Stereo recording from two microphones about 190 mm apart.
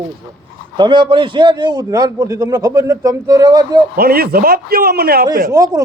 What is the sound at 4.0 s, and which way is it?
A man's voice, 50° right (ahead or behind).